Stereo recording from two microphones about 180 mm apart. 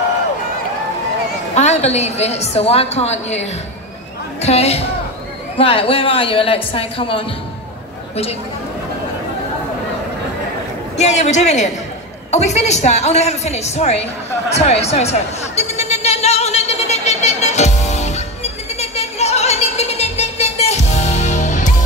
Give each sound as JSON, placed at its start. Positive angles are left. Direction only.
{"t": 1.5, "sound": "a woman's voice", "side_deg": 40}
{"t": 11.0, "sound": "a woman's voice", "side_deg": 40}
{"t": 14.5, "sound": "a sound", "side_deg": 35}